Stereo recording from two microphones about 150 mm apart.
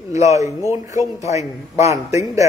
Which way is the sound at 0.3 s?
20° right (ahead or behind).